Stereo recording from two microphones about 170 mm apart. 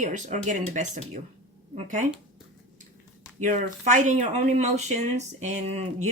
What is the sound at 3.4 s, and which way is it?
Speech, 45° right (ahead or behind).